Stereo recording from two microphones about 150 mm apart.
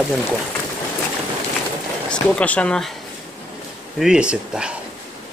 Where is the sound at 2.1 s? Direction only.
10° left (ahead or behind).